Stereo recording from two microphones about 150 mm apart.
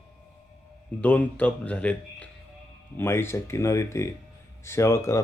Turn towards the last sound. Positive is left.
turn(degrees=20)  # may be behind; listen again after turning